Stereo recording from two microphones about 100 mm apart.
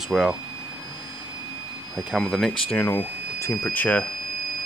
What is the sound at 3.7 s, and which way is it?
Speech, 15° left (ahead or behind).